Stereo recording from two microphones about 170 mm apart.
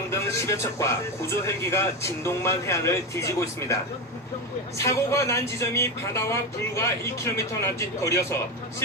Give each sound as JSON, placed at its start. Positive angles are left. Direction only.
{"t": 0.1, "sound": "speech", "side_deg": 15}
{"t": 4.8, "sound": "speech", "side_deg": 15}